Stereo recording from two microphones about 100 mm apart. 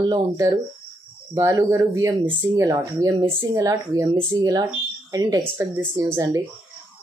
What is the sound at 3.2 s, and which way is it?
Speech, 25° right (ahead or behind).